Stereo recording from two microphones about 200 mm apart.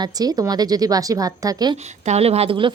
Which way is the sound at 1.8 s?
35° right (ahead or behind).